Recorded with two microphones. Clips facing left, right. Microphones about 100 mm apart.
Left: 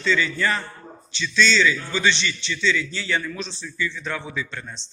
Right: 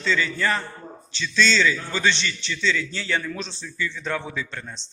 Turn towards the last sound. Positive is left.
turn(degrees=-45)  # may be behind; listen again after turning